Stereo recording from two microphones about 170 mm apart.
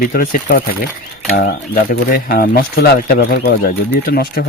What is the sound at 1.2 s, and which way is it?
Speech, 75° left (ahead or behind).